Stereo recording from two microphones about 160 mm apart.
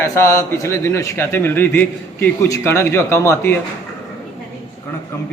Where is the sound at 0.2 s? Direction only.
15° left (ahead or behind).